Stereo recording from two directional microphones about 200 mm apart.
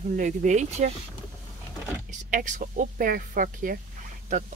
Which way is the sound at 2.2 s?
40° right (ahead or behind).